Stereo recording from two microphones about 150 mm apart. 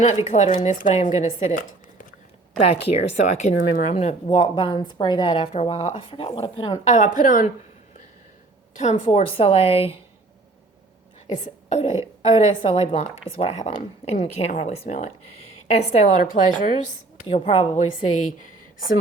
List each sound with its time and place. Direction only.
0.3 s a woman's voice: 50° left (ahead or behind)
4.5 s speech: 30° left (ahead or behind)
5.3 s speech: 45° left (ahead or behind)
6.8 s a woman's voice: 55° left (ahead or behind)
8.8 s speech: 50° left (ahead or behind)
11.3 s a woman's voice: 50° left (ahead or behind)
12.2 s a woman's voice: 35° left (ahead or behind); by 16.9 s 60° left (ahead or behind)
17.2 s speech: 40° left (ahead or behind)
18.3 s a woman's voice: 60° left (ahead or behind)